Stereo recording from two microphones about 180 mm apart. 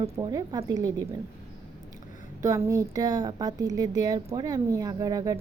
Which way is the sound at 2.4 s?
15° right (ahead or behind).